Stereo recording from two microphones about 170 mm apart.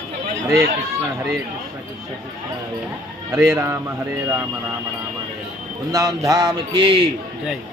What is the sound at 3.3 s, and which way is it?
Speech, 15° right (ahead or behind).